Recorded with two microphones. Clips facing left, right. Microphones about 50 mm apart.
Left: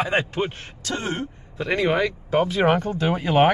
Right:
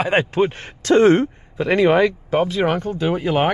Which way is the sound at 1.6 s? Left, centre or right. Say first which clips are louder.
Right 6 dB; right.